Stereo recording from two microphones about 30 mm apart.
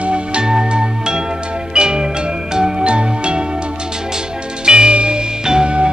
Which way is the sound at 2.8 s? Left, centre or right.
Right.